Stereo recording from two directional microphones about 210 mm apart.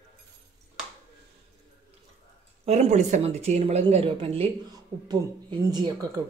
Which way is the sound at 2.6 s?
30° right (ahead or behind).